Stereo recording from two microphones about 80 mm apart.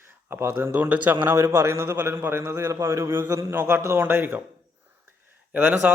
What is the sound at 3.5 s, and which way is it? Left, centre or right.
Speech, centre.